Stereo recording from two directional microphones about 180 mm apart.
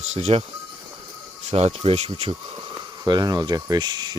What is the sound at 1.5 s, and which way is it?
Speech, 35° right (ahead or behind).